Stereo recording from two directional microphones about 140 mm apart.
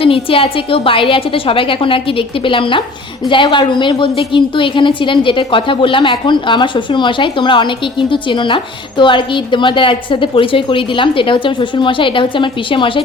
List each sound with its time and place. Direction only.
0.0 s a woman's voice: 40° left (ahead or behind)